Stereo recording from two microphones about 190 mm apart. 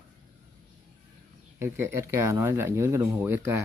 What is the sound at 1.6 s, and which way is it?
Speech, 15° right (ahead or behind).